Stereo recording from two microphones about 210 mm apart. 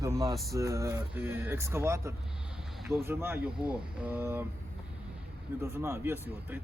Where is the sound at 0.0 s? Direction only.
15° right (ahead or behind).